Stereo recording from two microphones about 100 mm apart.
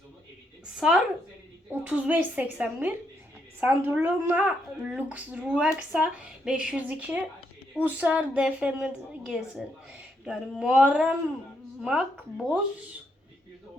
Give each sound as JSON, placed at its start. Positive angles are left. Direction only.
{"t": 0.8, "sound": "speech", "side_deg": -5}
{"t": 10.7, "sound": "speech", "side_deg": -10}